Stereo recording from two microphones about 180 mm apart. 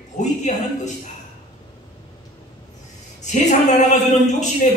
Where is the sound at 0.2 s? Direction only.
40° left (ahead or behind).